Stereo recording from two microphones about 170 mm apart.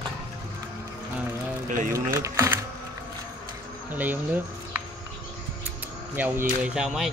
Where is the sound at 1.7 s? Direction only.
55° right (ahead or behind).